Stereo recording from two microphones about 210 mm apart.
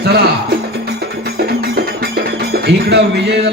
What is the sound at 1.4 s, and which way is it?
Music, 50° right (ahead or behind).